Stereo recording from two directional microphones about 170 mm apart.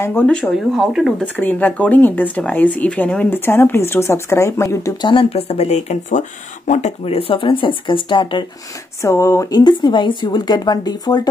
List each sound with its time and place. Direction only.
0.0 s speech: 10° left (ahead or behind)
1.2 s speech: 10° left (ahead or behind); by 8.5 s 30° left (ahead or behind)
9.0 s speech: 15° left (ahead or behind)